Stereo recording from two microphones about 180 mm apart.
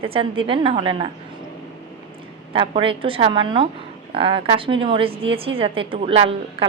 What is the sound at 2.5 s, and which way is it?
A woman's voice, 30° right (ahead or behind).